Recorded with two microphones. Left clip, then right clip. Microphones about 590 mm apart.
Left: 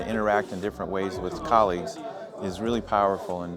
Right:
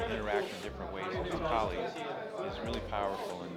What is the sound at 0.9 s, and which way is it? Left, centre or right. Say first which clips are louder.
Speech: left 6 dB; left.